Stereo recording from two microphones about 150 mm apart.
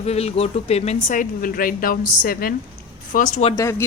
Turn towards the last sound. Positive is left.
turn(degrees=20)  # may be behind; listen again after turning